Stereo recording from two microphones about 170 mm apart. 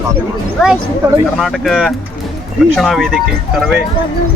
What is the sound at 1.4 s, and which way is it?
Speech, centre (ahead or behind).